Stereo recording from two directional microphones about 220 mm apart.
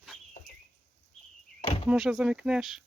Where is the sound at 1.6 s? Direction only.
25° left (ahead or behind).